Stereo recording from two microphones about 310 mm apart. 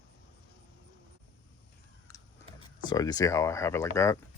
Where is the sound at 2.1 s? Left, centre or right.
Centre.